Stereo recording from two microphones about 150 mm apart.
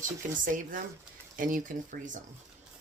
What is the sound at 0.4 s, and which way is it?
Speech, 60° right (ahead or behind).